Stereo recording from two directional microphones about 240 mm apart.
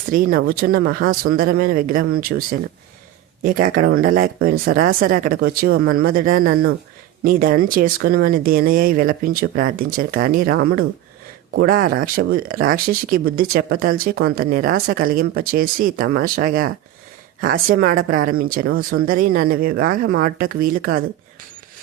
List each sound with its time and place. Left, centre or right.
0.1 s speech: right